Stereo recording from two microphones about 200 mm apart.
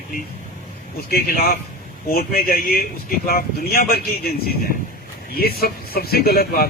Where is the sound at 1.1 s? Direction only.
50° left (ahead or behind).